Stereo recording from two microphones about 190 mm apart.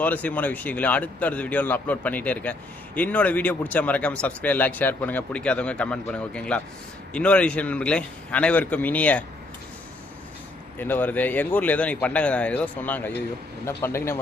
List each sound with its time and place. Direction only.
0.0 s speech: 10° left (ahead or behind)
10.8 s speech: 10° left (ahead or behind)